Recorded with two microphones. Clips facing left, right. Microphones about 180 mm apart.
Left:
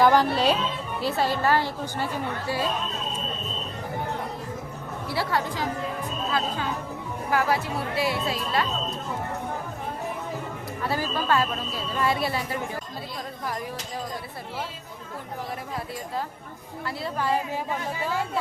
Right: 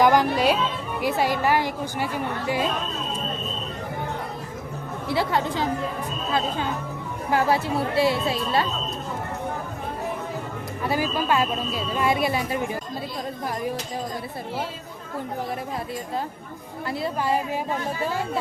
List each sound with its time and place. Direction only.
0.0 s a woman's voice: 15° right (ahead or behind)
5.0 s speech: 20° right (ahead or behind)
7.3 s speech: 25° right (ahead or behind)
10.8 s a woman's voice: 15° right (ahead or behind)
17.0 s a woman's voice: 15° right (ahead or behind)